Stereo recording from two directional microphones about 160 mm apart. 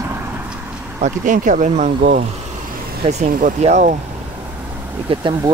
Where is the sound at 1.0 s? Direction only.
55° right (ahead or behind).